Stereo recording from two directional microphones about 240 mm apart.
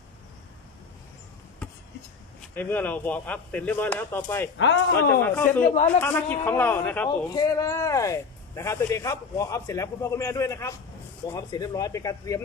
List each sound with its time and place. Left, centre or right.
2.4 s speech: centre
4.5 s speech: left
5.2 s speech: centre
5.6 s a man's voice: left
6.0 s speech: centre